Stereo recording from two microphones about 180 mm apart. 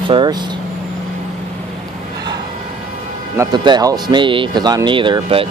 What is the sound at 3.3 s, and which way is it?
Speech, 20° right (ahead or behind).